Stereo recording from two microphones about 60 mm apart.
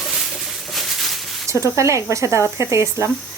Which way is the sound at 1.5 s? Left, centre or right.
Right.